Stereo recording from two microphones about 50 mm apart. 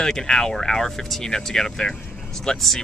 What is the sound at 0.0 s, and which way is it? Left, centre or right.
Speech, centre.